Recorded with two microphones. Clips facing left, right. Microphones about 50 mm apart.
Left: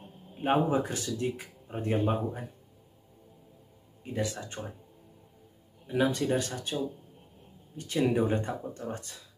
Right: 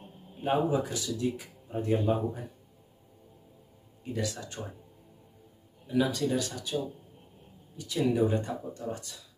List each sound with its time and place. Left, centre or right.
0.0 s a sound: centre
0.4 s speech: left
4.0 s speech: left
5.9 s speech: left